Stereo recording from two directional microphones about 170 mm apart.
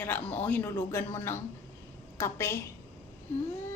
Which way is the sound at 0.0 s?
10° left (ahead or behind).